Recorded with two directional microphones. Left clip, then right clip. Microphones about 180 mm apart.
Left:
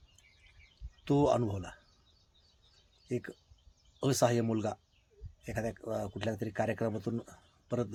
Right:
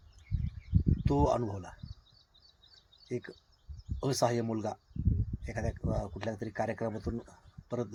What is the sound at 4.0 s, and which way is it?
Speech, 35° left (ahead or behind).